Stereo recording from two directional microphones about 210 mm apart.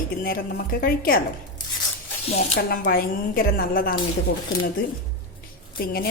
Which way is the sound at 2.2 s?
50° left (ahead or behind).